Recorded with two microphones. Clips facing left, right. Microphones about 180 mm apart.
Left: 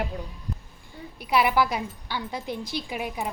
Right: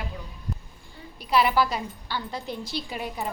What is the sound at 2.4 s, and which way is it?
Speech, 50° left (ahead or behind).